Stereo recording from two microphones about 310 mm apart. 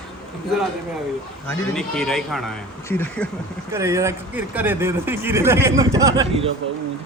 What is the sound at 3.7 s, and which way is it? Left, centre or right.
Speech, centre.